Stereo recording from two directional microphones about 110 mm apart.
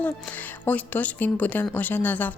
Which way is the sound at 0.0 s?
15° left (ahead or behind).